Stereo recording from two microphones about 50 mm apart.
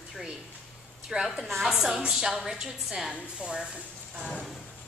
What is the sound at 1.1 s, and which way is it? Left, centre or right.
A woman's voice, centre.